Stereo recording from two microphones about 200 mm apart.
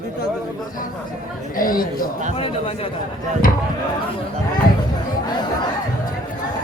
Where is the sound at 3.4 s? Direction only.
45° left (ahead or behind).